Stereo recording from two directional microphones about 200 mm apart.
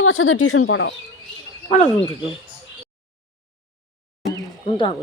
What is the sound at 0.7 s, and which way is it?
Speech, 70° left (ahead or behind).